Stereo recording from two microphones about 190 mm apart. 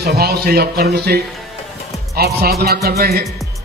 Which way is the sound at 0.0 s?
55° right (ahead or behind).